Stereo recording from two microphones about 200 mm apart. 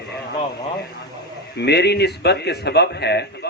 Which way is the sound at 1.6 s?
55° left (ahead or behind).